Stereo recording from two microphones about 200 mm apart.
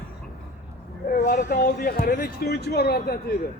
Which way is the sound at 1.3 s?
45° left (ahead or behind).